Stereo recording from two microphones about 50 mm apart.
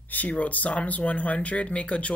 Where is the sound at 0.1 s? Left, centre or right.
Left.